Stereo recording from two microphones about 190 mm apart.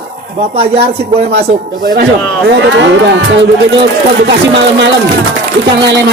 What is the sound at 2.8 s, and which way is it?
Speech, 70° right (ahead or behind).